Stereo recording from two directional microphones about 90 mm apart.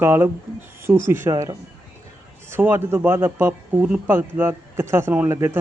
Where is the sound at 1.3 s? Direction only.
35° right (ahead or behind).